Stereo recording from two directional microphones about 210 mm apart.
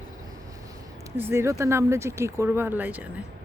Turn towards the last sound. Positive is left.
turn(degrees=-10)  # may be behind; listen again after turning